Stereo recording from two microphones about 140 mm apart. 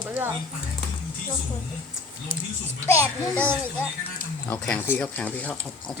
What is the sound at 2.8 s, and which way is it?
Speech, 15° left (ahead or behind).